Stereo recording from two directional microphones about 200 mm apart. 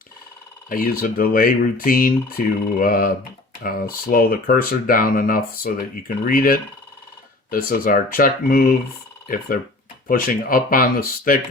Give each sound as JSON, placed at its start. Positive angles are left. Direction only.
{"t": 0.7, "sound": "speech", "side_deg": 45}